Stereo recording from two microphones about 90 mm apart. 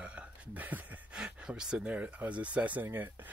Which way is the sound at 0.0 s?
15° right (ahead or behind).